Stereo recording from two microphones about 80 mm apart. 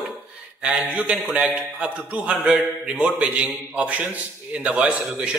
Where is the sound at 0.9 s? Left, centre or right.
Centre.